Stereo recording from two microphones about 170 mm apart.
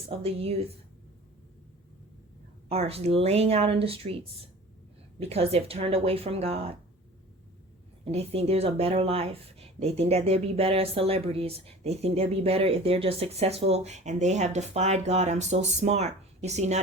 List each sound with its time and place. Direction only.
0.1 s speech: 35° right (ahead or behind)
2.6 s speech: 35° right (ahead or behind)
5.3 s speech: 35° right (ahead or behind)
8.0 s speech: 35° right (ahead or behind)